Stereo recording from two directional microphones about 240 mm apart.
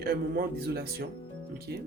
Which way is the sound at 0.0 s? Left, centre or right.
Right.